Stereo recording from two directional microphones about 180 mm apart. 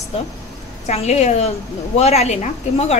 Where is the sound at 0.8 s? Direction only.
40° left (ahead or behind).